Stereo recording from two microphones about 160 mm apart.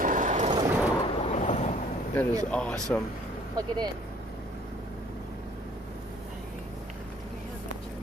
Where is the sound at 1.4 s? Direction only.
45° left (ahead or behind).